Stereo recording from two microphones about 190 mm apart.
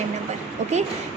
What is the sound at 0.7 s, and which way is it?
Speech, 35° right (ahead or behind).